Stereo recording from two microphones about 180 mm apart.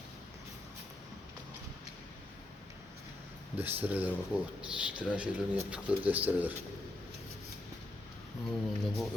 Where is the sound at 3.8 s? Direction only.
10° right (ahead or behind).